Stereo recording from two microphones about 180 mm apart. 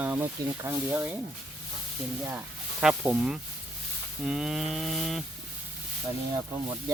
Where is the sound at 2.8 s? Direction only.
5° right (ahead or behind).